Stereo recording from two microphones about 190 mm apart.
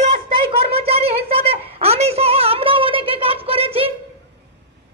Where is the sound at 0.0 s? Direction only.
30° right (ahead or behind).